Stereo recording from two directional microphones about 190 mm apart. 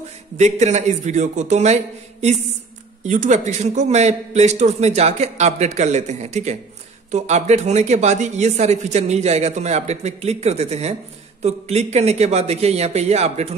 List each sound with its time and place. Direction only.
0.4 s speech: 40° right (ahead or behind)
3.1 s speech: 40° right (ahead or behind)